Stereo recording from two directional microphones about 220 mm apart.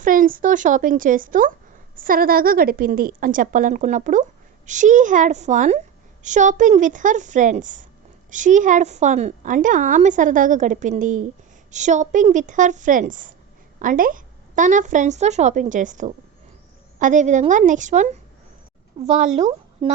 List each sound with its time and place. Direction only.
0.0 s a woman's voice: 40° right (ahead or behind)